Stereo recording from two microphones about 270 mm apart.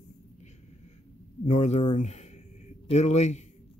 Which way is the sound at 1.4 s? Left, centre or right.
Left.